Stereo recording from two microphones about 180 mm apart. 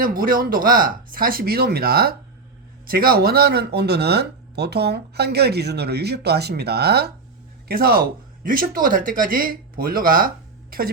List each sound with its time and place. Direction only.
0.0 s speech: 50° right (ahead or behind)